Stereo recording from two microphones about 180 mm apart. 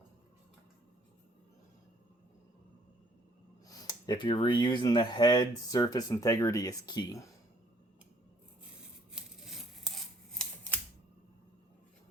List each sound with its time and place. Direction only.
3.7 s speech: 20° left (ahead or behind)
9.1 s scissors: centre (ahead or behind)